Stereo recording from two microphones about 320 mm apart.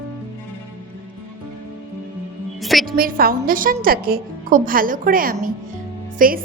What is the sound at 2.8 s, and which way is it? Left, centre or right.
A woman's voice, right.